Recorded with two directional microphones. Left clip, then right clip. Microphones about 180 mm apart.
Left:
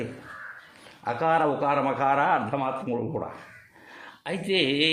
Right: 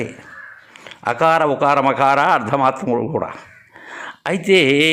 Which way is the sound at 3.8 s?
30° right (ahead or behind).